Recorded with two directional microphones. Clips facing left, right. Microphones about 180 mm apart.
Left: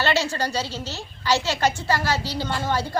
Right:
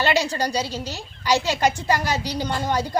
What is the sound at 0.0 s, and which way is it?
A woman's voice, 15° right (ahead or behind).